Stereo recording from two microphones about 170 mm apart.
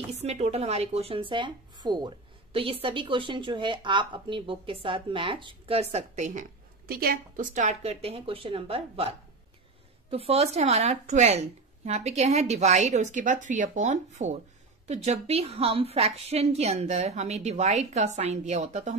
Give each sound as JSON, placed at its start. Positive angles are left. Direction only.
{"t": 0.1, "sound": "speech", "side_deg": -40}
{"t": 6.9, "sound": "speech", "side_deg": -60}
{"t": 10.1, "sound": "speech", "side_deg": -35}